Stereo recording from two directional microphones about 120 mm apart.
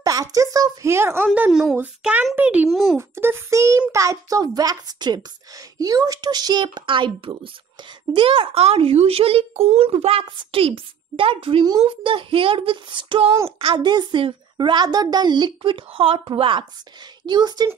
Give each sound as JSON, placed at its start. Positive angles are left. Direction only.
{"t": 0.0, "sound": "a child's voice", "side_deg": -30}
{"t": 2.7, "sound": "speech", "side_deg": 0}
{"t": 3.0, "sound": "a child's voice", "side_deg": -20}